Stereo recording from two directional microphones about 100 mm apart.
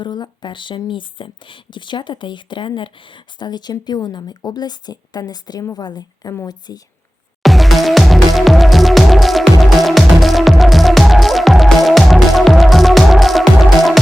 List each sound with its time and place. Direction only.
0.0 s speech: 45° left (ahead or behind)
7.4 s music: centre (ahead or behind)